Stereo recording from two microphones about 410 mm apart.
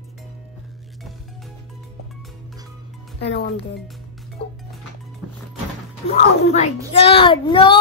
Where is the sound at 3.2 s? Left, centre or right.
Left.